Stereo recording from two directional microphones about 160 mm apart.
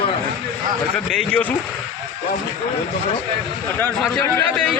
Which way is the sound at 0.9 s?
5° left (ahead or behind).